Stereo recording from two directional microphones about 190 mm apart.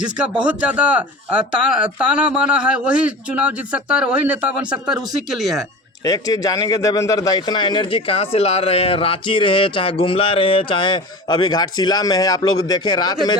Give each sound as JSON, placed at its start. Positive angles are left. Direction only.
{"t": 0.4, "sound": "speech", "side_deg": -5}
{"t": 6.1, "sound": "speech", "side_deg": 20}